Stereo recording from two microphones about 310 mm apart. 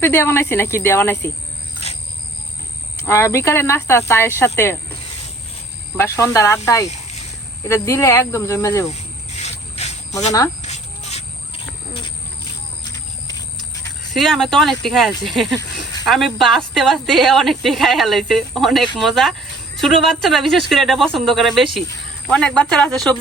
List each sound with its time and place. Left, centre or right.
0.0 s speech: centre
3.1 s speech: centre
6.0 s speech: centre
6.8 s a sound: left
7.7 s speech: centre
8.9 s a sound: left
14.1 s a woman's voice: centre